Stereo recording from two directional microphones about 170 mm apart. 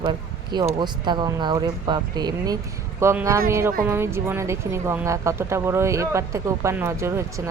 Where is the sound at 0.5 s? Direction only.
20° right (ahead or behind).